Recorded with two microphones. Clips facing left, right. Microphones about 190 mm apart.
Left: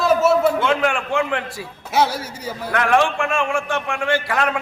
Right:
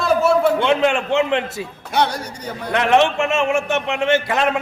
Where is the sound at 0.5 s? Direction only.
25° right (ahead or behind).